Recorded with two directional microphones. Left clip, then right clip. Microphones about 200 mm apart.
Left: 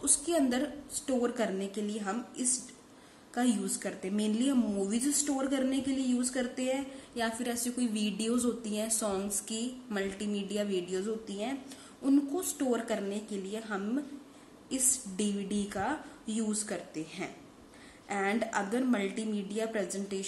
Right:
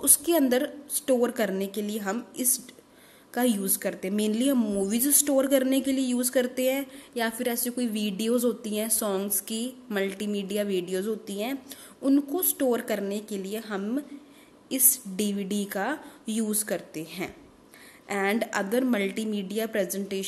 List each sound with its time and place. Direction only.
0.0 s a woman's voice: 45° right (ahead or behind)